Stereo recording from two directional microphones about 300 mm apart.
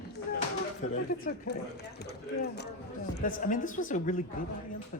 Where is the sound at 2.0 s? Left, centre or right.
Left.